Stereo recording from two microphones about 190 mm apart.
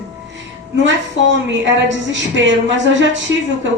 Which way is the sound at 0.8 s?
70° right (ahead or behind).